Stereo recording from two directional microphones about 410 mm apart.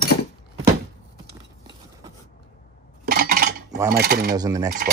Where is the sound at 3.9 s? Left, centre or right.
Right.